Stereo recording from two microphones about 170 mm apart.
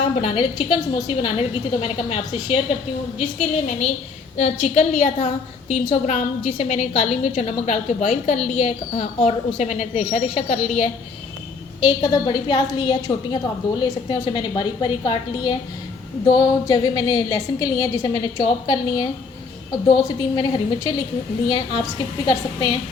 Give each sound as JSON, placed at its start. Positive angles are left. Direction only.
{"t": 0.2, "sound": "a woman's voice", "side_deg": 30}
{"t": 11.8, "sound": "a woman's voice", "side_deg": 25}